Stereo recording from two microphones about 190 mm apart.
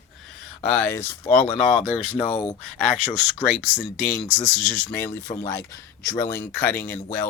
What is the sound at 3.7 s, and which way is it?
Speech, centre (ahead or behind).